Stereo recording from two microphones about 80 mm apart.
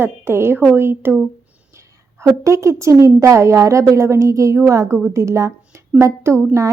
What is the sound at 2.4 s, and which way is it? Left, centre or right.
A woman's voice, right.